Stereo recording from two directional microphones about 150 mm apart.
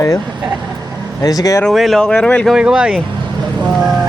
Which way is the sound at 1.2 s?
25° left (ahead or behind).